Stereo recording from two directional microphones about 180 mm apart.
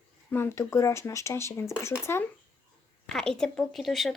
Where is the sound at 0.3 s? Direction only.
15° left (ahead or behind).